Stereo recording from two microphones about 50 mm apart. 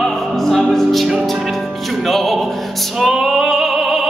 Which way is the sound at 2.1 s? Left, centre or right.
Centre.